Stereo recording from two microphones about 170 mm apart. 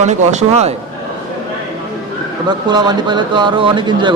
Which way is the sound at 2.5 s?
25° right (ahead or behind).